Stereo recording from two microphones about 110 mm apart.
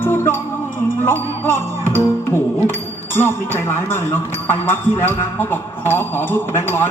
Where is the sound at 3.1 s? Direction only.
20° left (ahead or behind).